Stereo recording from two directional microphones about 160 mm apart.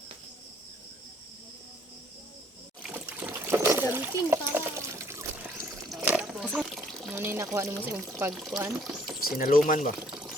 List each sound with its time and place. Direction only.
2.8 s splash: 10° right (ahead or behind)
5.9 s splash: 5° right (ahead or behind)
6.5 s water: 5° right (ahead or behind)
7.1 s speech: 15° right (ahead or behind)
7.9 s speech: centre (ahead or behind)
9.6 s speech: 55° left (ahead or behind)
10.1 s pour: 5° right (ahead or behind)